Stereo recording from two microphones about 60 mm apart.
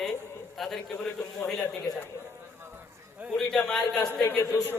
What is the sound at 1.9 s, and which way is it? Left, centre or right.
Speech, left.